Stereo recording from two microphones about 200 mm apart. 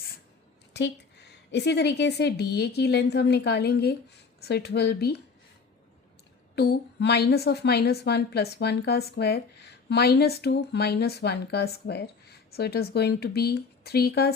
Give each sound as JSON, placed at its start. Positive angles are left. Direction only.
{"t": 0.7, "sound": "a woman's voice", "side_deg": 55}
{"t": 6.6, "sound": "a woman's voice", "side_deg": 55}